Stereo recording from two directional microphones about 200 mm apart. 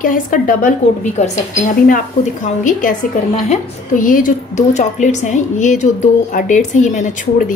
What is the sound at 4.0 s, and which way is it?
A woman's voice, 40° left (ahead or behind).